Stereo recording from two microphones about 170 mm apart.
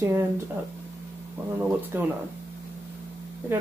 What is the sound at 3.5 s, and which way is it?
Speech, 10° right (ahead or behind).